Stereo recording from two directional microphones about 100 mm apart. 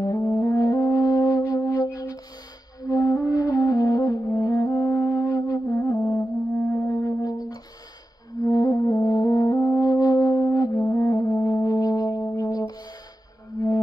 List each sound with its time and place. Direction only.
0.0 s music: 35° left (ahead or behind)